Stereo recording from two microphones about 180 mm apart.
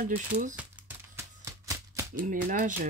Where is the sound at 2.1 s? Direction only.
50° right (ahead or behind).